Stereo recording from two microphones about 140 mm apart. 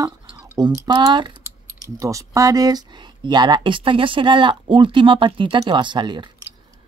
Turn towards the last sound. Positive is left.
turn(degrees=-35)  # may be behind; listen again after turning